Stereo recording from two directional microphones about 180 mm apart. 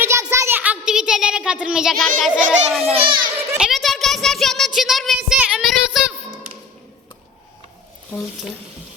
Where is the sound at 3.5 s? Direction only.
Centre (ahead or behind).